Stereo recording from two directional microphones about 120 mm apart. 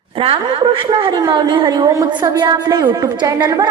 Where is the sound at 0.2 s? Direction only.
50° right (ahead or behind).